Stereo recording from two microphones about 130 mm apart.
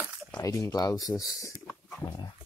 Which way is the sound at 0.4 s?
25° left (ahead or behind).